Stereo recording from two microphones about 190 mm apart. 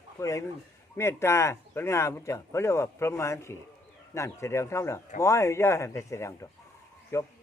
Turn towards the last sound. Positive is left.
turn(degrees=15)  # may be behind; listen again after turning